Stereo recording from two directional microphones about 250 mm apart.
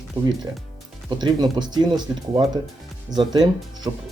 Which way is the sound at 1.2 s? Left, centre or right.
Centre.